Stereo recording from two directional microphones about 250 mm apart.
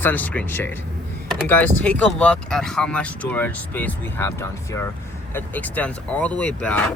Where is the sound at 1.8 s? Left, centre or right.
Centre.